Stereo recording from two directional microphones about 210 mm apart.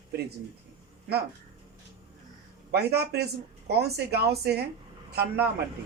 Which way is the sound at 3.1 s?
50° right (ahead or behind).